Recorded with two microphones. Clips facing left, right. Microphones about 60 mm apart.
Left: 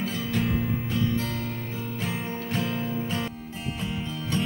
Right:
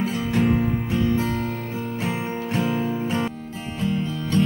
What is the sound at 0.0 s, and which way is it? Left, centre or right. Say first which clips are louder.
Music: right 6 dB; centre.